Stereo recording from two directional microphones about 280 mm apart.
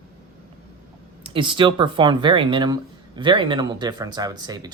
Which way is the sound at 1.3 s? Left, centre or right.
Centre.